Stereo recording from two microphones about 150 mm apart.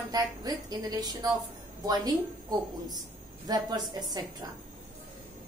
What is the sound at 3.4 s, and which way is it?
A woman's voice, 25° right (ahead or behind).